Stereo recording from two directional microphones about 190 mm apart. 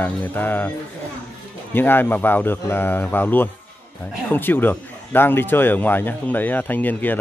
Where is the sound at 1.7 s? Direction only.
10° left (ahead or behind).